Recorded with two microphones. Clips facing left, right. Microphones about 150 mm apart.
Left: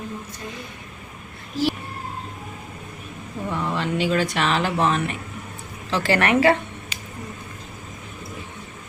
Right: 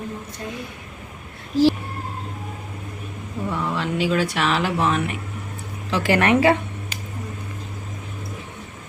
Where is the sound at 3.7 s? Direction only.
5° right (ahead or behind).